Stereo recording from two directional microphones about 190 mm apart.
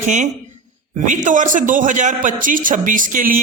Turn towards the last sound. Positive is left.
turn(degrees=-45)  # may be behind; listen again after turning